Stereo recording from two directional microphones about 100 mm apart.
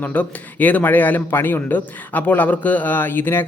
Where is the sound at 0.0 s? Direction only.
15° left (ahead or behind).